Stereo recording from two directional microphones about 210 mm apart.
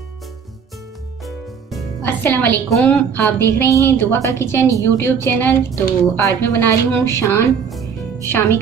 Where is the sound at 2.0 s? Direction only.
10° left (ahead or behind).